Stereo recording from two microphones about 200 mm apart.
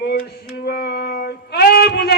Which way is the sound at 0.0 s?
55° left (ahead or behind).